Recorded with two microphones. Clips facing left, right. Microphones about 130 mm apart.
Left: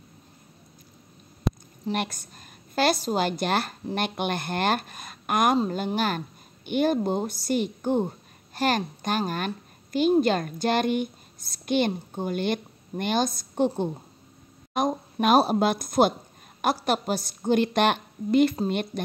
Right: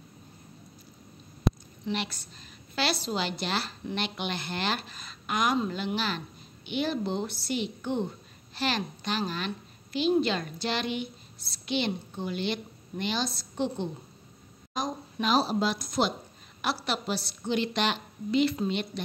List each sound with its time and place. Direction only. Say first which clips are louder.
1.9 s a woman's voice: left 4 dB; 45° left (ahead or behind)
5.6 s a woman's voice: left 5 dB; 40° left (ahead or behind)